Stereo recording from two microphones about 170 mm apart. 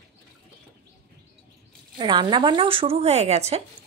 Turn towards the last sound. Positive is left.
turn(degrees=-40)  # may be behind; listen again after turning